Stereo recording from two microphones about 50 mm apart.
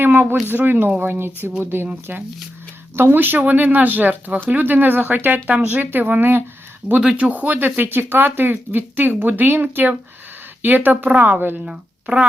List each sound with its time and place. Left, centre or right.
0.0 s speech: right
2.9 s speech: right
6.8 s speech: right
7.2 s speech: right
11.6 s speech: centre